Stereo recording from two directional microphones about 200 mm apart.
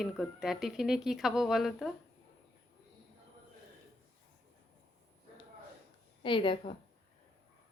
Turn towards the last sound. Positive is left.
turn(degrees=25)  # may be behind; listen again after turning